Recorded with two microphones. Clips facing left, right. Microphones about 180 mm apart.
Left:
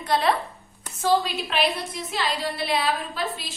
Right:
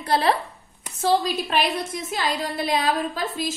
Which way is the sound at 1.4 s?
45° right (ahead or behind).